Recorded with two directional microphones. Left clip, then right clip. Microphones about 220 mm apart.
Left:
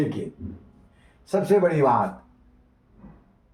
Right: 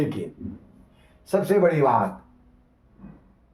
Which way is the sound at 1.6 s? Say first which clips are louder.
Right 1 dB; 20° right (ahead or behind).